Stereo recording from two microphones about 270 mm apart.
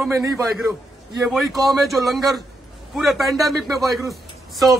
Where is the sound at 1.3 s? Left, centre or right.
Centre.